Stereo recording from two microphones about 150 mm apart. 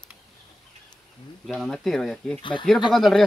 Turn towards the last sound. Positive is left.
turn(degrees=0)  # may be behind; listen again after turning